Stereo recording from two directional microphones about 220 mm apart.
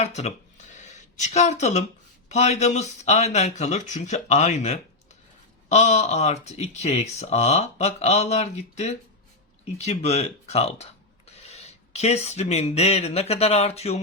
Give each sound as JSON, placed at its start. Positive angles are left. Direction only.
{"t": 0.0, "sound": "speech", "side_deg": 30}